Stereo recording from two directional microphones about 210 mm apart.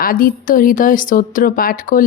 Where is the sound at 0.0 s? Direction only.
45° left (ahead or behind).